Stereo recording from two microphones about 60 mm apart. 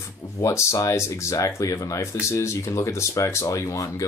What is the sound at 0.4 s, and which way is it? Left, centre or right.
Speech, left.